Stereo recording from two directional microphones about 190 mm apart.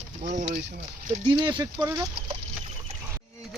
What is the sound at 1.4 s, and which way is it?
Speech, 25° right (ahead or behind).